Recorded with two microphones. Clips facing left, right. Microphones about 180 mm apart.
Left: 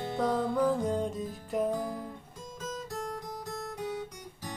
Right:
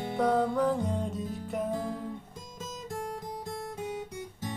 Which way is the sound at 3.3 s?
25° right (ahead or behind).